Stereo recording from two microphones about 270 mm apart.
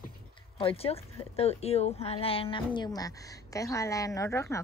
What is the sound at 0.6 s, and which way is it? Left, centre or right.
Speech, left.